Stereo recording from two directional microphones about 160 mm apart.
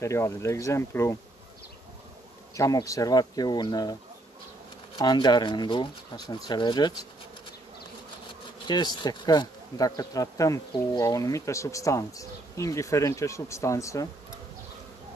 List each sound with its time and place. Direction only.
0.0 s speech: 20° left (ahead or behind)
2.5 s speech: 20° left (ahead or behind)
4.9 s speech: 25° left (ahead or behind)
8.6 s speech: 25° left (ahead or behind)